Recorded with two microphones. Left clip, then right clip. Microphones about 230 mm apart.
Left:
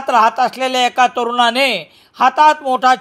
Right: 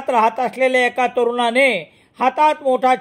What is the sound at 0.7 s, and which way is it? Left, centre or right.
Speech, centre.